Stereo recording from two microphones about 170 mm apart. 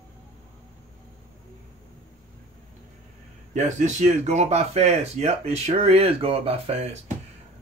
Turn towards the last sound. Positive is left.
turn(degrees=-40)  # may be behind; listen again after turning